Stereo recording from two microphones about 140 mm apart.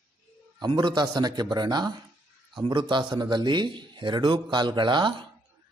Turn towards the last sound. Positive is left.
turn(degrees=-35)  # may be behind; listen again after turning